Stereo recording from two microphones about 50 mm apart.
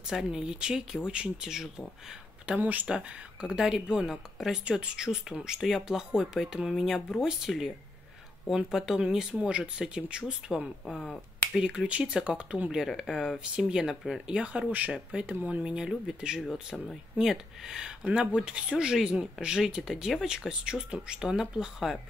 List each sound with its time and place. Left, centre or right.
0.0 s speech: centre
2.6 s speech: right
2.9 s speech: right
3.4 s speech: centre
4.6 s speech: centre
10.9 s speech: centre
11.5 s speech: centre
12.8 s speech: centre
13.4 s speech: centre
16.9 s speech: centre
18.0 s speech: right